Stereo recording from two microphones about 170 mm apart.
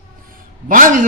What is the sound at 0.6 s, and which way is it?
Speech, 50° right (ahead or behind).